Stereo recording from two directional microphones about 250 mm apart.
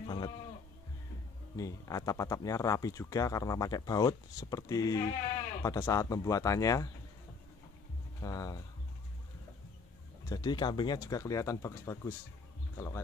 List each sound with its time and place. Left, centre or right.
0.0 s sheep: centre
1.6 s speech: centre
8.2 s speech: centre
10.3 s speech: centre